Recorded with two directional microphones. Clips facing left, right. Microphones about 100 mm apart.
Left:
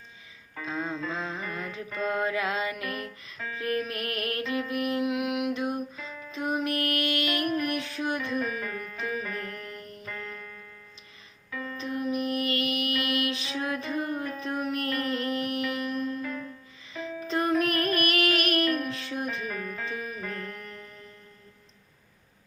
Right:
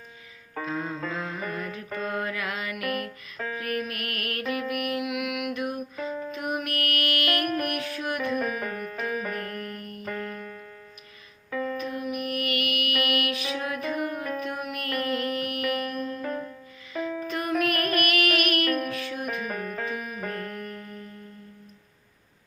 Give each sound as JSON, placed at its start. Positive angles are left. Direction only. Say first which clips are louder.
{"t": 0.7, "sound": "music", "louder": "even", "side_deg": 25}
{"t": 1.1, "sound": "mantra", "louder": "right 2 dB", "side_deg": 25}
{"t": 2.0, "sound": "music", "louder": "left 3 dB", "side_deg": 25}
{"t": 3.3, "sound": "music", "louder": "right 5 dB", "side_deg": -45}
{"t": 3.6, "sound": "music", "louder": "left 3 dB", "side_deg": 25}
{"t": 6.0, "sound": "music", "louder": "right 9 dB", "side_deg": -50}
{"t": 6.3, "sound": "music", "louder": "left 2 dB", "side_deg": 25}
{"t": 7.4, "sound": "music", "louder": "even", "side_deg": -60}
{"t": 7.7, "sound": "music", "louder": "even", "side_deg": 25}
{"t": 8.5, "sound": "music", "louder": "right 3 dB", "side_deg": -40}
{"t": 11.8, "sound": "music", "louder": "left 1 dB", "side_deg": 30}
{"t": 16.2, "sound": "music", "louder": "right 3 dB", "side_deg": -45}
{"t": 17.2, "sound": "music", "louder": "left 3 dB", "side_deg": 30}
{"t": 19.4, "sound": "music", "louder": "right 3 dB", "side_deg": -40}